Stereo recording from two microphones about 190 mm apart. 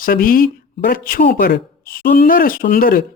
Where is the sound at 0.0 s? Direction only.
50° left (ahead or behind).